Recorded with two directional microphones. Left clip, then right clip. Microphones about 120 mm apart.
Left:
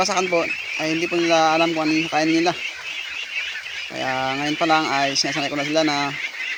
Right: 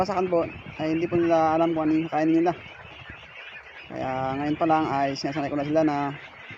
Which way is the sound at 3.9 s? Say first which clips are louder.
Left 4 dB; 40° left (ahead or behind).